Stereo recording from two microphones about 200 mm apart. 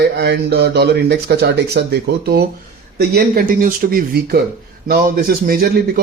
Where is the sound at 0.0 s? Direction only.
55° right (ahead or behind).